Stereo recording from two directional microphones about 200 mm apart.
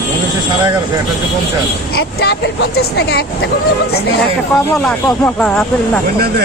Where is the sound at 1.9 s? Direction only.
50° left (ahead or behind).